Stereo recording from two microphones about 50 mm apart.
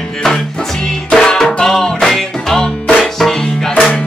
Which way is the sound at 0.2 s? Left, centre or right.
Centre.